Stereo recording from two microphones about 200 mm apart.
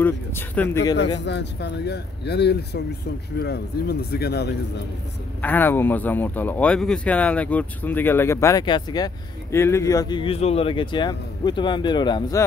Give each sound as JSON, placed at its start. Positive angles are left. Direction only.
{"t": 0.0, "sound": "speech", "side_deg": 10}
{"t": 1.2, "sound": "speech", "side_deg": 60}
{"t": 5.4, "sound": "speech", "side_deg": 10}